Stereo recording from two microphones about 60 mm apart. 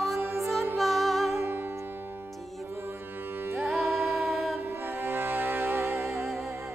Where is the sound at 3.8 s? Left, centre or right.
Right.